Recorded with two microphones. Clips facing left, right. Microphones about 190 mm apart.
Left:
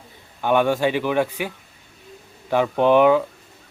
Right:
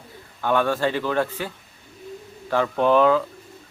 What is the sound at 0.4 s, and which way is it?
Speech, 15° left (ahead or behind).